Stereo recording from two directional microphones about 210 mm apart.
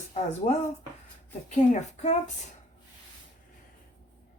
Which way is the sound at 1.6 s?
35° left (ahead or behind).